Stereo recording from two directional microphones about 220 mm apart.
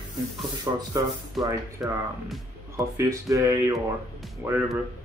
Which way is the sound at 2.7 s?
15° right (ahead or behind).